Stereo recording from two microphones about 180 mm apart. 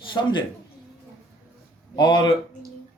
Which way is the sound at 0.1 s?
25° left (ahead or behind).